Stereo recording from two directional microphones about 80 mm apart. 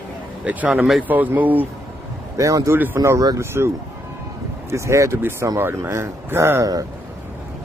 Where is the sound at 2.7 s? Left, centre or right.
Right.